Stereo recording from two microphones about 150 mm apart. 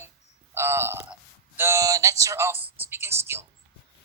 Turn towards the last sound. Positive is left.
turn(degrees=-15)  # may be behind; listen again after turning